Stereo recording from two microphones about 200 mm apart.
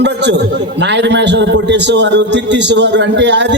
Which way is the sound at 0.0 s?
60° right (ahead or behind).